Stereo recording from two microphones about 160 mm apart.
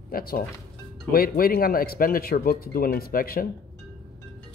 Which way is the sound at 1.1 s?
65° left (ahead or behind).